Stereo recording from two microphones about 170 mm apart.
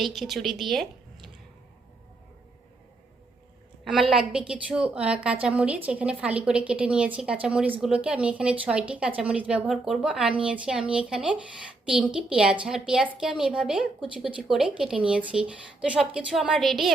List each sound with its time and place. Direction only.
0.0 s a woman's voice: centre (ahead or behind)
4.1 s a woman's voice: 5° right (ahead or behind)